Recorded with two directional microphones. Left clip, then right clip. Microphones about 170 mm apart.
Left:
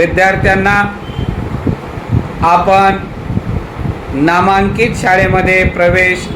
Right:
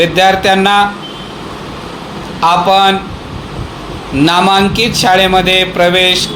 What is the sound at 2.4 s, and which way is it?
Speech, 50° right (ahead or behind).